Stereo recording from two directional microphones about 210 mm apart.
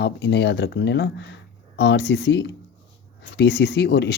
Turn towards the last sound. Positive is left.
turn(degrees=50)  # may be behind; listen again after turning